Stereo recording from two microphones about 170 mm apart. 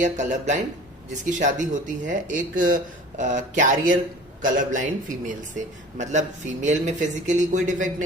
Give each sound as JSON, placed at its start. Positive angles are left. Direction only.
{"t": 0.0, "sound": "speech", "side_deg": -45}